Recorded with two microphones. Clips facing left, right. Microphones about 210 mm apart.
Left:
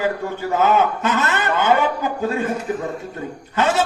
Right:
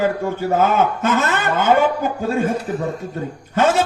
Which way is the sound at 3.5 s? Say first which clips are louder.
Right 3 dB; 45° right (ahead or behind).